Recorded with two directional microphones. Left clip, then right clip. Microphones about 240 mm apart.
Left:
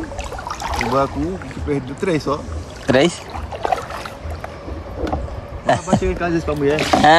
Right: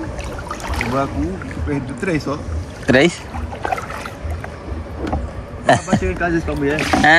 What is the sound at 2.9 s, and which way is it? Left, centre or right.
Speech, centre.